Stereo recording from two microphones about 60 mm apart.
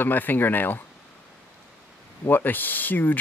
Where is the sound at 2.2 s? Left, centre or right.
Left.